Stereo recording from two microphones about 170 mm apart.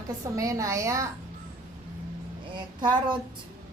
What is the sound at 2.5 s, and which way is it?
Speech, 25° right (ahead or behind).